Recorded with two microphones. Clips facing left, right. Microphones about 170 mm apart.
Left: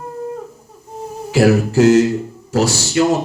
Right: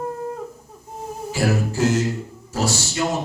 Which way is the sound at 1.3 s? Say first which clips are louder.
Left 9 dB; 75° left (ahead or behind).